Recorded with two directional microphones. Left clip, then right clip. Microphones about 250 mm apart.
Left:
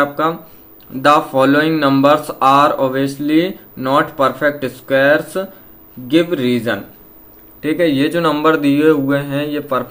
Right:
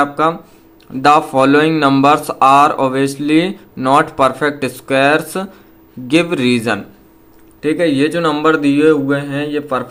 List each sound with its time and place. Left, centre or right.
0.0 s speech: centre
7.6 s speech: centre